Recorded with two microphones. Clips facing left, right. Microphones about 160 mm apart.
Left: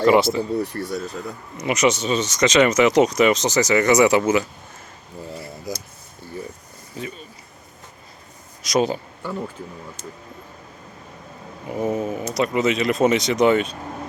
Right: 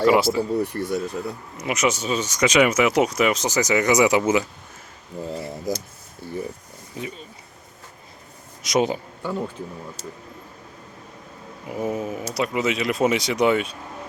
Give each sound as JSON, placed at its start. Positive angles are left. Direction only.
{"t": 0.0, "sound": "speech", "side_deg": -5}
{"t": 7.0, "sound": "speech", "side_deg": -20}
{"t": 8.6, "sound": "speech", "side_deg": -20}
{"t": 11.7, "sound": "speech", "side_deg": -5}